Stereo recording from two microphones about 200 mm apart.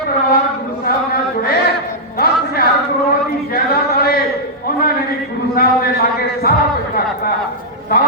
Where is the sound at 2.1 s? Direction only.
50° left (ahead or behind).